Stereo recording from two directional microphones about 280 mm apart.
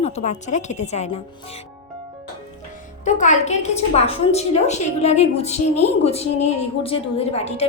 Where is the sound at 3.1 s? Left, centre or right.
Left.